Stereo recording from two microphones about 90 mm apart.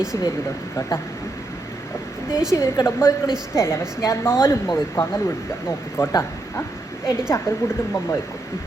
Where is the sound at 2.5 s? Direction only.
35° left (ahead or behind).